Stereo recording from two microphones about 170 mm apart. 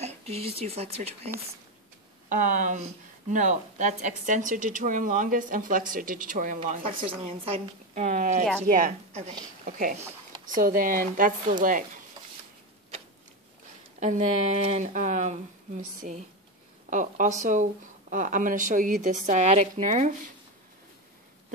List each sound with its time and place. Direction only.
0.0 s speech: 35° right (ahead or behind)
2.2 s speech: 50° right (ahead or behind)
7.2 s speech: 40° right (ahead or behind)
13.9 s speech: 45° right (ahead or behind)